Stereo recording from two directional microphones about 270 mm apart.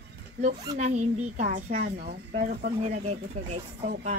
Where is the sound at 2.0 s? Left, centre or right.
Right.